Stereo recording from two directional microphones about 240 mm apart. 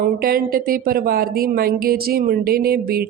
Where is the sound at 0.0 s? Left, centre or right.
Right.